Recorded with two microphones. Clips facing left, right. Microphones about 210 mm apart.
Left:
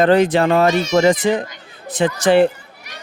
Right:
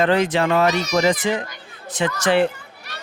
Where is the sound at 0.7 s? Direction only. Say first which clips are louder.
Left 4 dB; 25° left (ahead or behind).